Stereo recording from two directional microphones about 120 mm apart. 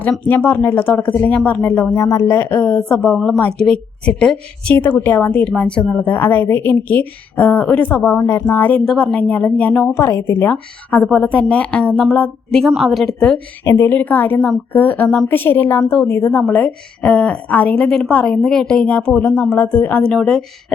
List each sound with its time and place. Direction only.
0.3 s a woman's voice: 15° left (ahead or behind)
13.7 s a woman's voice: 20° left (ahead or behind); by 20.7 s 5° left (ahead or behind)